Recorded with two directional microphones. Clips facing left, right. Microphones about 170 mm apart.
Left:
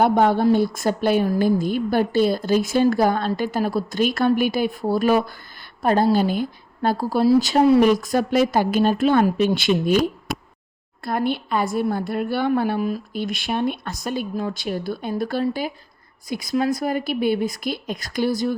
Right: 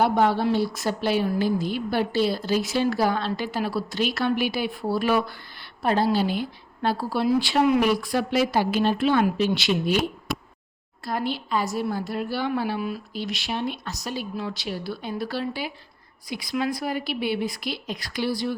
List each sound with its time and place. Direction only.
0.0 s speech: 50° left (ahead or behind)
11.0 s speech: 55° left (ahead or behind)